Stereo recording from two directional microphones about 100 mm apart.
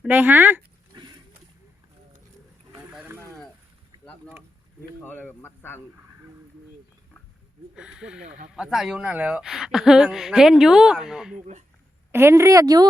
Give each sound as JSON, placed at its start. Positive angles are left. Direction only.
{"t": 0.0, "sound": "speech", "side_deg": -15}
{"t": 0.9, "sound": "a sound", "side_deg": -45}
{"t": 3.1, "sound": "a sound", "side_deg": -25}
{"t": 5.0, "sound": "speech", "side_deg": 15}
{"t": 7.8, "sound": "speech", "side_deg": -10}
{"t": 12.1, "sound": "a woman's voice", "side_deg": -25}